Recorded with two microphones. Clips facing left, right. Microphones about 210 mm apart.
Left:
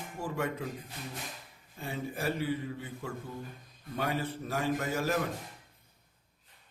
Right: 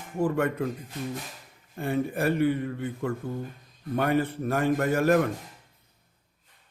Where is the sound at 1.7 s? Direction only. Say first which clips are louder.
Right 10 dB; 60° right (ahead or behind).